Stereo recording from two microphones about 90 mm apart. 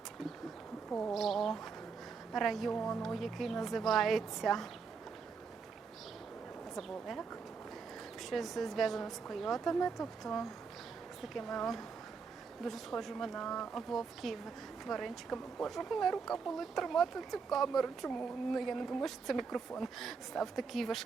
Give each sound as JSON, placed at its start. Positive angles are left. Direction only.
{"t": 0.9, "sound": "speech", "side_deg": 20}
{"t": 1.1, "sound": "speech", "side_deg": 0}
{"t": 6.7, "sound": "speech", "side_deg": 0}
{"t": 8.3, "sound": "speech", "side_deg": 0}